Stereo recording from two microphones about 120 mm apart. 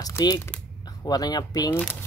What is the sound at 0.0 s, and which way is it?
Speech, 30° left (ahead or behind).